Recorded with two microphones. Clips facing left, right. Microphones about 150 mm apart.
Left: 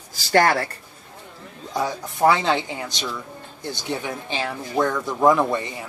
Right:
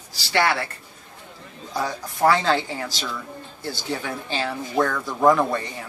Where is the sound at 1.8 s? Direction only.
20° left (ahead or behind).